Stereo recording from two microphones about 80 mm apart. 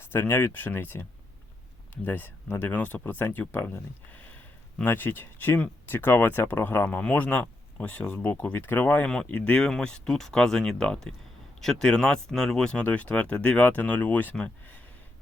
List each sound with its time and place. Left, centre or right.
0.0 s speech: left
2.0 s speech: left
9.0 s speech: centre